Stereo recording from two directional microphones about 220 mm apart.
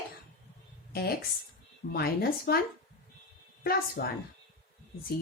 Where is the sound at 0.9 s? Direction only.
45° left (ahead or behind).